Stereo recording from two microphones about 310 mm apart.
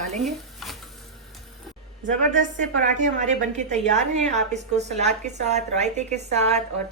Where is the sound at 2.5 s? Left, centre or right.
Right.